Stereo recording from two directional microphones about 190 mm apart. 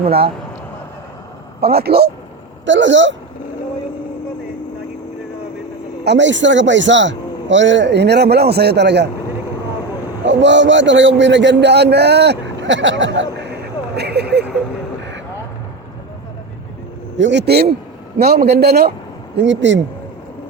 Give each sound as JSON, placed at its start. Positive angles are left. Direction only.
{"t": 0.0, "sound": "speech", "side_deg": -30}
{"t": 1.6, "sound": "a man's voice", "side_deg": -55}
{"t": 2.6, "sound": "a man's voice", "side_deg": -75}
{"t": 6.1, "sound": "a man's voice", "side_deg": -75}
{"t": 10.2, "sound": "a man's voice", "side_deg": -70}
{"t": 13.9, "sound": "speech", "side_deg": -60}
{"t": 17.2, "sound": "a man's voice", "side_deg": -70}
{"t": 19.4, "sound": "a man's voice", "side_deg": -70}